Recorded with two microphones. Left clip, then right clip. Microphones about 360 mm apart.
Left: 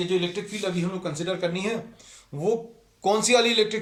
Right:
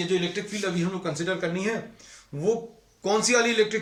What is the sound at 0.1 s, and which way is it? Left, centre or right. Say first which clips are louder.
A man's voice: left 1 dB; centre.